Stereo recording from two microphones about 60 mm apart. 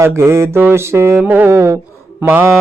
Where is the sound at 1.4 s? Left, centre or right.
Right.